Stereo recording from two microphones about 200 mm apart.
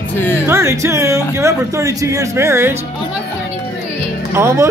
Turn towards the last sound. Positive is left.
turn(degrees=-15)  # may be behind; listen again after turning